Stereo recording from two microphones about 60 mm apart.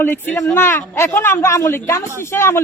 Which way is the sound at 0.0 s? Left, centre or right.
Left.